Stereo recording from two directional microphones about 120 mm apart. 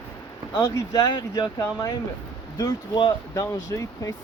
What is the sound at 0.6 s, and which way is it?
Speech, 30° left (ahead or behind).